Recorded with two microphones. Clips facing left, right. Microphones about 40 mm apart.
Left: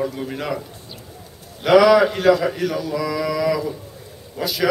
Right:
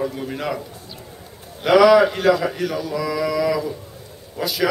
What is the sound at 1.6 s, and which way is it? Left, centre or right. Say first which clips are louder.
A man's voice: even; centre.